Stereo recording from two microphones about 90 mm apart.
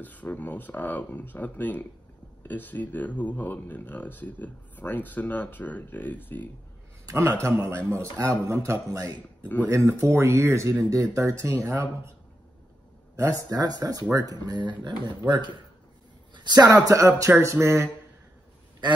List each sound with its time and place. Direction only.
0.0 s speech: 15° left (ahead or behind)
7.1 s speech: 30° right (ahead or behind)
13.1 s speech: 40° right (ahead or behind); by 15.5 s 55° right (ahead or behind)
16.3 s a sound: 50° right (ahead or behind)
16.7 s speech: 35° right (ahead or behind)